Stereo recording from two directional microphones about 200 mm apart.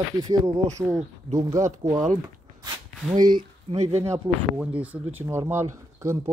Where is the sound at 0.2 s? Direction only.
15° right (ahead or behind).